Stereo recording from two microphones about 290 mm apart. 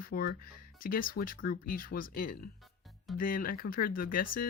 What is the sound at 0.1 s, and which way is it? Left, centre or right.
Speech, left.